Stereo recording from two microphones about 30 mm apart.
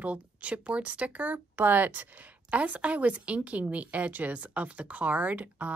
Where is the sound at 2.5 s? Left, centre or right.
Right.